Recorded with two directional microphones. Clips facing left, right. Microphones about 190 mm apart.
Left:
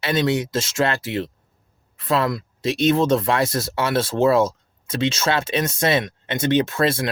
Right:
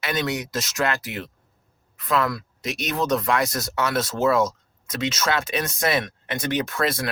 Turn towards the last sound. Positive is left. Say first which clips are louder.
# left 5 dB
turn(degrees=25)  # may be behind; listen again after turning